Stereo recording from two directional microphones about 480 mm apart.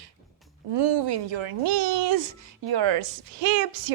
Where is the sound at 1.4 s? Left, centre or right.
Right.